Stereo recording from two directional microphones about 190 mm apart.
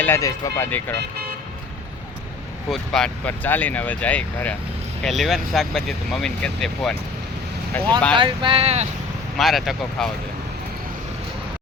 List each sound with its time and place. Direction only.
0.0 s speech: 15° left (ahead or behind)
2.6 s speech: 5° left (ahead or behind)
8.1 s speech: 25° right (ahead or behind)
9.4 s speech: centre (ahead or behind)